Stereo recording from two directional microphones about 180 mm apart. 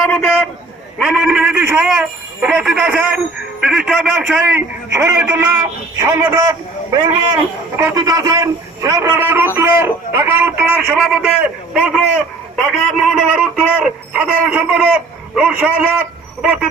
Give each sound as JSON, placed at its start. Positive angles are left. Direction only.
{"t": 0.0, "sound": "a sound", "side_deg": 5}
{"t": 0.9, "sound": "a man's voice", "side_deg": -5}
{"t": 7.8, "sound": "a man's voice", "side_deg": -20}